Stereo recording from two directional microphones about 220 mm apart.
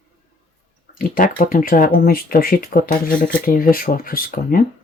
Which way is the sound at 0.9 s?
40° left (ahead or behind).